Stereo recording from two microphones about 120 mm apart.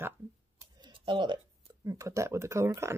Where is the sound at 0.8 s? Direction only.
40° right (ahead or behind).